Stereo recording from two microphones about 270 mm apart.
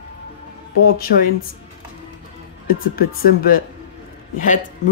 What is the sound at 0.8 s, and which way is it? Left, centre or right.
Speech, left.